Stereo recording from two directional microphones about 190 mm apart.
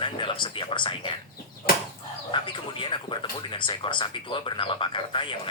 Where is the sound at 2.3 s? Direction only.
25° left (ahead or behind).